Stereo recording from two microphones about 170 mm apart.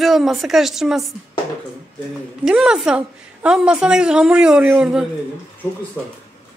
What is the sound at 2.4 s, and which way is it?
Speech, 5° right (ahead or behind).